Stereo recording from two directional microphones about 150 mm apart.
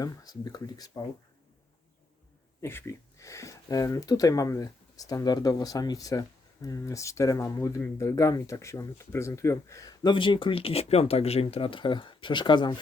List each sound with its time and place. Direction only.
0.0 s speech: 25° left (ahead or behind)
2.6 s speech: 15° left (ahead or behind)